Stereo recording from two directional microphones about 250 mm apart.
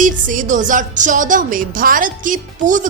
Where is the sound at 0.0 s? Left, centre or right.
Right.